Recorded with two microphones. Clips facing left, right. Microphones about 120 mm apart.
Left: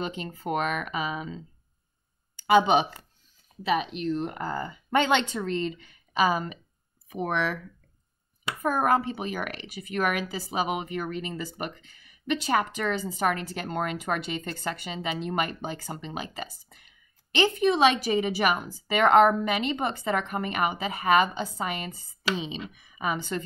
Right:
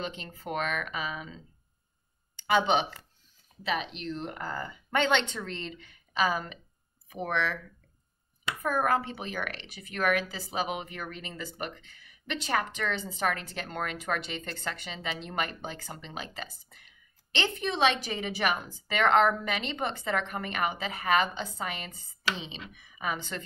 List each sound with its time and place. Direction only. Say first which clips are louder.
0.0 s a woman's voice: left 5 dB; 10° left (ahead or behind)
8.8 s a woman's voice: left 4 dB; 15° left (ahead or behind)